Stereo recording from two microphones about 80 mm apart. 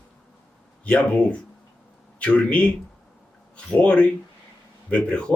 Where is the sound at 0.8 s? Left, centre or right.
Centre.